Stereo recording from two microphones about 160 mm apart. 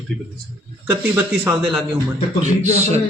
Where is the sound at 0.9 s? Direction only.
15° right (ahead or behind).